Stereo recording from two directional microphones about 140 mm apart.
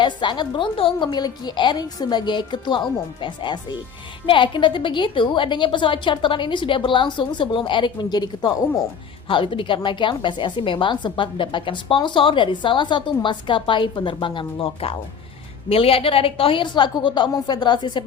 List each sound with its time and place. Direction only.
0.0 s a woman's voice: 35° left (ahead or behind)